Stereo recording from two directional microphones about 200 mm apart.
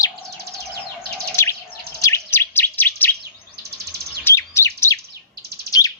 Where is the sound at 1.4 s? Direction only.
15° left (ahead or behind).